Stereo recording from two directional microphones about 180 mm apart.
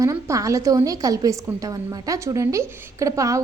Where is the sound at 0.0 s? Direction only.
15° right (ahead or behind).